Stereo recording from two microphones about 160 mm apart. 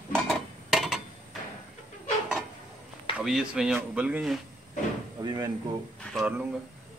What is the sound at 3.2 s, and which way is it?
Speech, 5° right (ahead or behind).